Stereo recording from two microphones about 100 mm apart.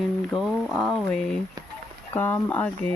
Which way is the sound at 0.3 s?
Centre (ahead or behind).